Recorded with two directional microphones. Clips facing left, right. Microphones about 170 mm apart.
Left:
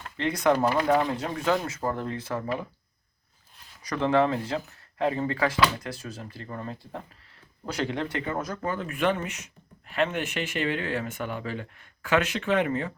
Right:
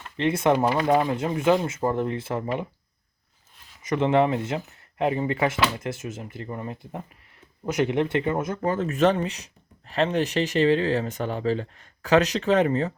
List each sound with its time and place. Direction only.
0.2 s speech: 25° right (ahead or behind)
3.8 s speech: 20° right (ahead or behind)
9.0 s speech: 35° right (ahead or behind)